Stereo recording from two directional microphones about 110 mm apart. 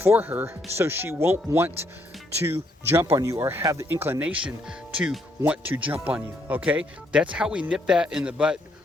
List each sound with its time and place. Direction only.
0.0 s speech: 20° right (ahead or behind)